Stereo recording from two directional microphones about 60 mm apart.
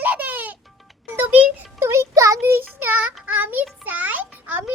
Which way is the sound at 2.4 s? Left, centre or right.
Right.